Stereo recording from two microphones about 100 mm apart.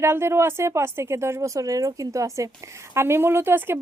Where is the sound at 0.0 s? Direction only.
25° right (ahead or behind).